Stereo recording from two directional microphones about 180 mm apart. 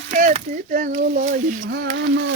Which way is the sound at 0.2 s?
45° right (ahead or behind).